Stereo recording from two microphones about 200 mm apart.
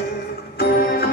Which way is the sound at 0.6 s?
50° left (ahead or behind).